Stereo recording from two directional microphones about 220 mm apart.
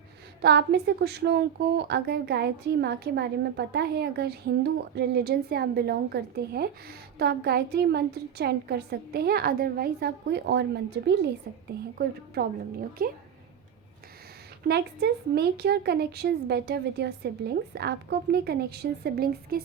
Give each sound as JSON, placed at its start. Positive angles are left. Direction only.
{"t": 0.4, "sound": "a woman's voice", "side_deg": -50}
{"t": 14.7, "sound": "a woman's voice", "side_deg": -45}